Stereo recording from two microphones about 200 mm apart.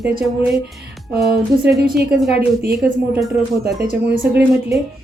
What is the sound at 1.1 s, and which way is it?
Speech, 5° right (ahead or behind).